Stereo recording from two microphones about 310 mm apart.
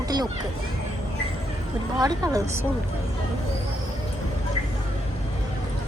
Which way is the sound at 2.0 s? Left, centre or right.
Centre.